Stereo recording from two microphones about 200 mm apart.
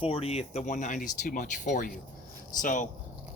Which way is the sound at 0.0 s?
30° left (ahead or behind).